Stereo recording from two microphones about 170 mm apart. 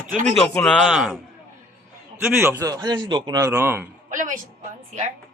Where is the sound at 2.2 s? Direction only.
10° right (ahead or behind).